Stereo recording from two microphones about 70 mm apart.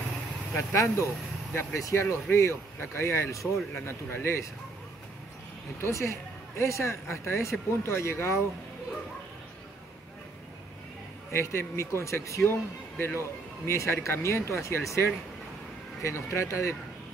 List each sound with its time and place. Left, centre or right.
0.6 s speech: left
3.7 s speech: left
5.8 s speech: left
11.3 s speech: left
12.9 s speech: left